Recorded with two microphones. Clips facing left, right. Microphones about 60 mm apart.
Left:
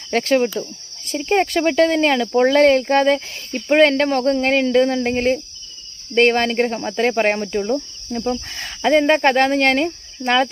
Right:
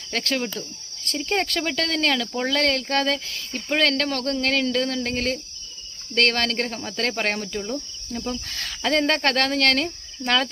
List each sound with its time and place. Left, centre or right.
0.1 s speech: left